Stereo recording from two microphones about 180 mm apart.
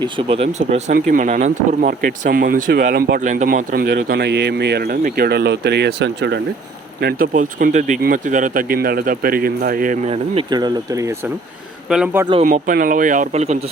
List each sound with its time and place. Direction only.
0.0 s speech: 30° right (ahead or behind)
0.9 s speech: 50° right (ahead or behind); by 6.4 s 75° right (ahead or behind)
7.0 s speech: 55° right (ahead or behind)
10.1 s a man's voice: 25° right (ahead or behind); by 12.2 s 5° right (ahead or behind)
12.2 s speech: 30° right (ahead or behind)
12.5 s speech: 50° right (ahead or behind)